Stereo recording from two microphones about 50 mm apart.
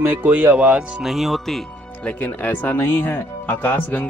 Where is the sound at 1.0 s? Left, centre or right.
Centre.